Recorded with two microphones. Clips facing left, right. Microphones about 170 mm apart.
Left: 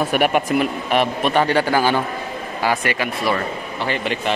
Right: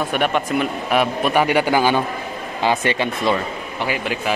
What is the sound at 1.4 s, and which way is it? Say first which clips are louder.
A man's voice: right 1 dB; 15° right (ahead or behind).